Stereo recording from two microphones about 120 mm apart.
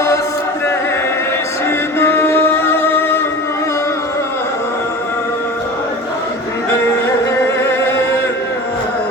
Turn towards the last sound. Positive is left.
turn(degrees=15)  # may be behind; listen again after turning